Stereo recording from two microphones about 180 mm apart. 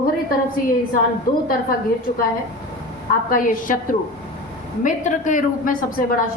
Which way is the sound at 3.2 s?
50° left (ahead or behind).